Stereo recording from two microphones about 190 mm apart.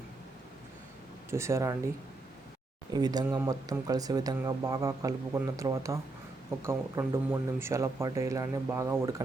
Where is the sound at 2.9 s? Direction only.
20° right (ahead or behind).